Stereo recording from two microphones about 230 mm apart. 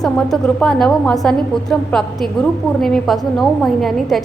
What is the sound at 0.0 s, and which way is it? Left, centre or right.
A woman's voice, centre.